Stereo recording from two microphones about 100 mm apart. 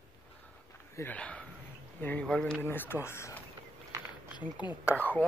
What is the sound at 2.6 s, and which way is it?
Speech, 20° left (ahead or behind).